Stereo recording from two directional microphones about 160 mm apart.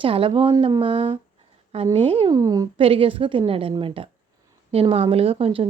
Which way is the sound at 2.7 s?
35° right (ahead or behind).